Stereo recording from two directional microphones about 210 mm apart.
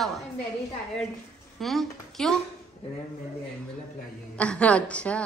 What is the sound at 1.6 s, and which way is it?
Speech, centre (ahead or behind).